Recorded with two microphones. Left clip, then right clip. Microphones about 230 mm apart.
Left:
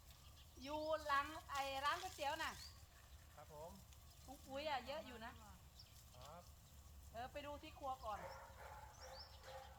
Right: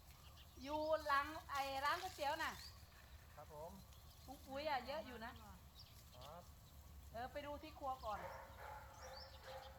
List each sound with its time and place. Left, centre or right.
0.6 s a sound: centre
4.3 s speech: centre
7.1 s speech: centre
8.2 s dog: centre